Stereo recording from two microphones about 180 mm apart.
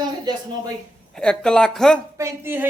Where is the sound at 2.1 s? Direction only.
15° right (ahead or behind).